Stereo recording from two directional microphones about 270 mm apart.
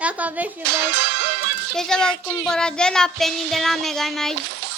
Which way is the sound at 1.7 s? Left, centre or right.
Centre.